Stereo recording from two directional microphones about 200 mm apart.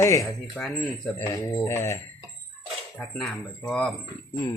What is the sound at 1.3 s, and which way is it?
Mantra, 20° left (ahead or behind).